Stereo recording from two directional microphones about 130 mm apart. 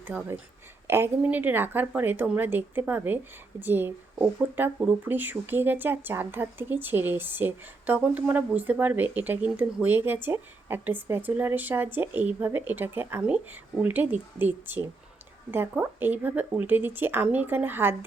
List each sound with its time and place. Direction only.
0.1 s a woman's voice: 10° right (ahead or behind)